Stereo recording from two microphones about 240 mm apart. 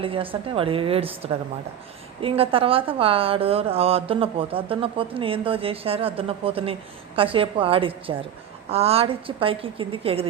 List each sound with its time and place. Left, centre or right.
0.0 s a woman's voice: right